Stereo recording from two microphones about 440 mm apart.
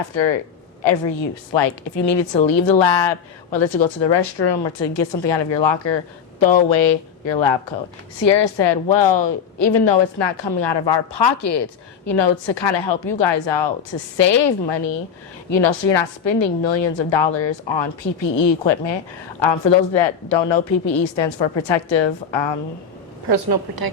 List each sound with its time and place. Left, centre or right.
0.8 s speech: left
1.5 s a woman's voice: left
2.1 s speech: centre
2.5 s a woman's voice: left
6.7 s a woman's voice: left
8.2 s a woman's voice: left
23.3 s a woman's voice: right